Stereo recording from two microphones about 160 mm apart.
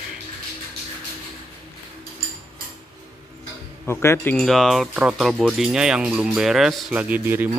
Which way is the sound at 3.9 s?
15° left (ahead or behind).